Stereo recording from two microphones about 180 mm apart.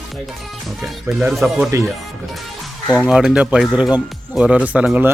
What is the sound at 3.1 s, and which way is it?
Speech, 5° right (ahead or behind).